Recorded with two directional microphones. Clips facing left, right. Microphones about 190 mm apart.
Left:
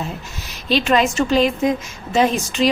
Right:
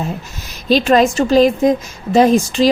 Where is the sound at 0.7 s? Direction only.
40° right (ahead or behind).